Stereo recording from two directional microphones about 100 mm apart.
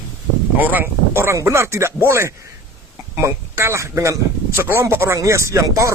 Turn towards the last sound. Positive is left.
turn(degrees=-30)  # may be behind; listen again after turning